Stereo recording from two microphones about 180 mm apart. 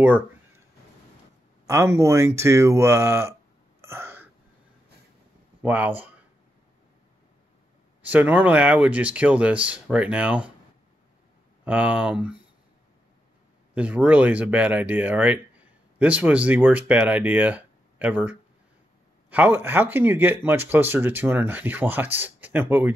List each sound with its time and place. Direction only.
1.7 s speech: 15° right (ahead or behind)
3.8 s a sound: 15° right (ahead or behind)
5.6 s speech: 10° right (ahead or behind)
8.0 s speech: 10° right (ahead or behind)
11.6 s speech: 5° right (ahead or behind)
13.7 s speech: 5° right (ahead or behind)